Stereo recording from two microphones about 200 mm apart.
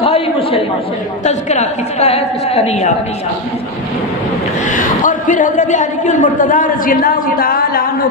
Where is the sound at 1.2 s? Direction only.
35° left (ahead or behind).